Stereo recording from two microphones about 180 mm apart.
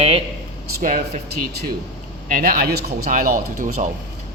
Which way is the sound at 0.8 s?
45° right (ahead or behind).